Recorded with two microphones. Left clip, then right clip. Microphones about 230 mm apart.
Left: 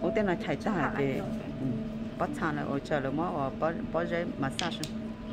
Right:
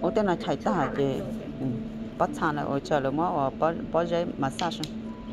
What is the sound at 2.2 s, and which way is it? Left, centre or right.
Speech, centre.